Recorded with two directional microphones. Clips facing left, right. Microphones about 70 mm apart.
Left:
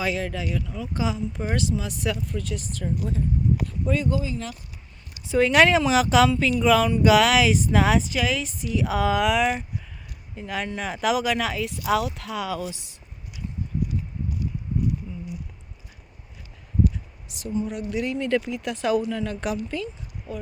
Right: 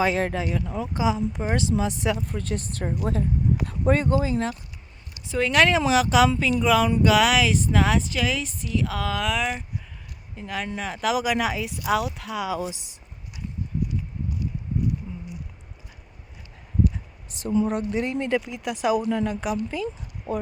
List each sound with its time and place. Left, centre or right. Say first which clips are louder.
0.2 s speech: right 3 dB; right
0.9 s speech: right 3 dB; centre
2.3 s speech: right 1 dB; right
5.2 s speech: left 3 dB; centre
12.5 s speech: right 2 dB; centre
17.2 s a sound: right 4 dB; right
17.7 s speech: right 3 dB; right
18.0 s speech: even; right
18.3 s speech: left 1 dB; centre
19.4 s speech: right 1 dB; centre